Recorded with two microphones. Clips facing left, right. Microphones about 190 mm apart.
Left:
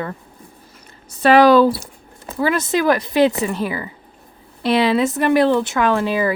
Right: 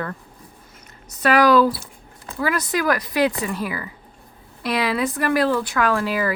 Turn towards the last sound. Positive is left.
turn(degrees=25)  # may be behind; listen again after turning